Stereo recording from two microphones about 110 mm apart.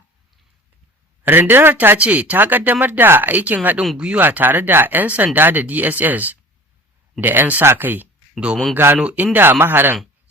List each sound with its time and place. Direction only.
1.2 s speech: 20° right (ahead or behind)